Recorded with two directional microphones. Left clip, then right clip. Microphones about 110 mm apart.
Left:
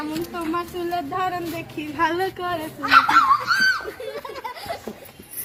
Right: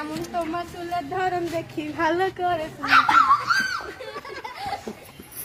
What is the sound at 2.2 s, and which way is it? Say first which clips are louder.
Speech: right 2 dB; 10° right (ahead or behind).